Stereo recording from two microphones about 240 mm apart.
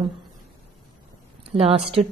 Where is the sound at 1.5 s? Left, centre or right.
Right.